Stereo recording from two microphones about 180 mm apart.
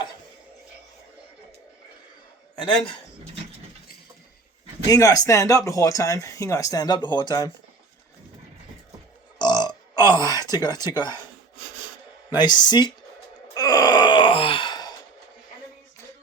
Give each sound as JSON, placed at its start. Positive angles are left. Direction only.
{"t": 4.9, "sound": "speech", "side_deg": 20}
{"t": 9.4, "sound": "burping", "side_deg": 25}
{"t": 12.3, "sound": "speech", "side_deg": 25}
{"t": 13.5, "sound": "wail", "side_deg": 20}